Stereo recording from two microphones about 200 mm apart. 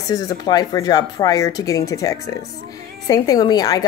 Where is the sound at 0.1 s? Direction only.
20° left (ahead or behind).